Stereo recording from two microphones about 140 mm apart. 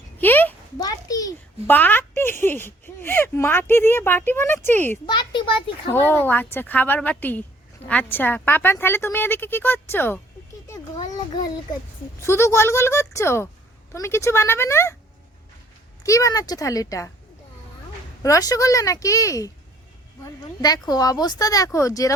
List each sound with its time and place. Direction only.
0.2 s a sound: 15° left (ahead or behind)
0.8 s a sound: 25° left (ahead or behind)
1.6 s speech: 15° left (ahead or behind)
5.0 s a sound: 35° left (ahead or behind)
5.9 s speech: 15° left (ahead or behind)
12.2 s speech: 20° left (ahead or behind)
16.0 s speech: 25° left (ahead or behind)
18.2 s speech: 25° left (ahead or behind)
20.6 s speech: 30° left (ahead or behind)